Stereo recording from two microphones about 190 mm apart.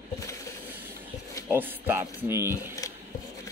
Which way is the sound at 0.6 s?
10° right (ahead or behind).